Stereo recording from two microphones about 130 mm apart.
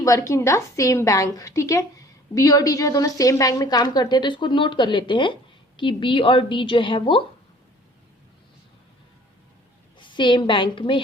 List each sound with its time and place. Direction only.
0.0 s a woman's voice: 25° left (ahead or behind); by 7.3 s 40° left (ahead or behind)
10.0 s a woman's voice: 40° left (ahead or behind)